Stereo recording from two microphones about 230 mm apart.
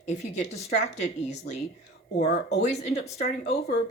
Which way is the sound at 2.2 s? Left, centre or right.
Left.